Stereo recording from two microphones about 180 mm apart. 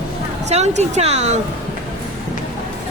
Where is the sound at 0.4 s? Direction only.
40° right (ahead or behind).